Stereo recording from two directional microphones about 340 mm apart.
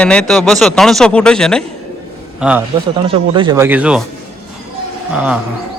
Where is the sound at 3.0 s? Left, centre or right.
Centre.